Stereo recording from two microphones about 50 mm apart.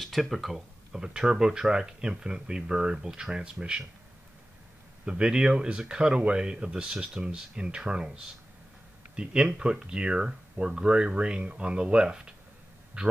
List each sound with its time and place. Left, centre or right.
0.0 s speech: centre
0.9 s speech: centre
5.0 s speech: centre
9.1 s speech: centre